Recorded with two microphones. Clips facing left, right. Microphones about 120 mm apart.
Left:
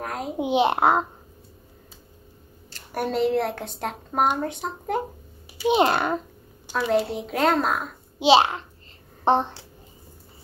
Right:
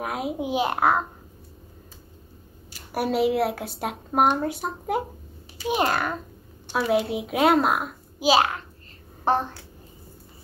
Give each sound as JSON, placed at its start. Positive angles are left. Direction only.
{"t": 0.0, "sound": "a woman's voice", "side_deg": -5}
{"t": 0.4, "sound": "a child's voice", "side_deg": 25}
{"t": 2.7, "sound": "a woman's voice", "side_deg": -10}
{"t": 5.7, "sound": "a child's voice", "side_deg": 20}
{"t": 6.7, "sound": "a woman's voice", "side_deg": -10}
{"t": 8.2, "sound": "a child's voice", "side_deg": 25}